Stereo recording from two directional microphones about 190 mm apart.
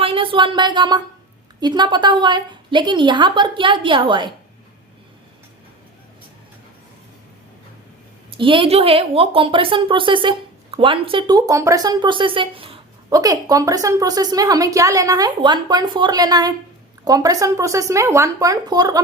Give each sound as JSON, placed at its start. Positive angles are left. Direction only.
{"t": 0.0, "sound": "speech", "side_deg": -30}
{"t": 8.4, "sound": "speech", "side_deg": -25}